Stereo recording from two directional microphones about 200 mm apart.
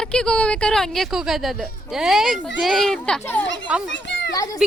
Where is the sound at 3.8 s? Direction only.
65° left (ahead or behind).